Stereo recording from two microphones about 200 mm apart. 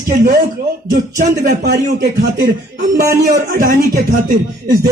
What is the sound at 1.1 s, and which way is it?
A man's voice, 45° right (ahead or behind).